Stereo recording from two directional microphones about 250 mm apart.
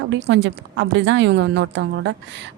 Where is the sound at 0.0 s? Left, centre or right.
Right.